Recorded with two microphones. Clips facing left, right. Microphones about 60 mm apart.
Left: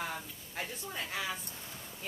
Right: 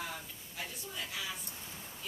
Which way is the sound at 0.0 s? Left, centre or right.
Left.